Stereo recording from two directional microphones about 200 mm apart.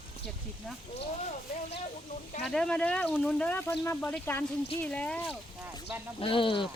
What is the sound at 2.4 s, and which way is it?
Speech, 5° left (ahead or behind).